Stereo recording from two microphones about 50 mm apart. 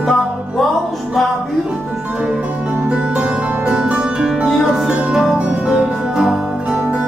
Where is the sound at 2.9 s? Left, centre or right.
Right.